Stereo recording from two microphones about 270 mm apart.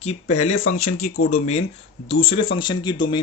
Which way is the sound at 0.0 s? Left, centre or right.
Left.